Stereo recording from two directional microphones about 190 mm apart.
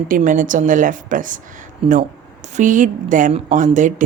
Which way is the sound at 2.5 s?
40° right (ahead or behind).